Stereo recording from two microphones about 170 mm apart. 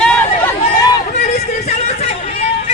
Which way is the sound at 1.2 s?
40° left (ahead or behind).